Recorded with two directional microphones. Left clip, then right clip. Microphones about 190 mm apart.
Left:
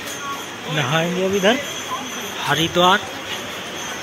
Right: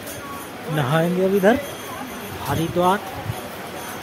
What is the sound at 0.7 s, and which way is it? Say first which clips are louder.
Speech: left 1 dB; 30° right (ahead or behind).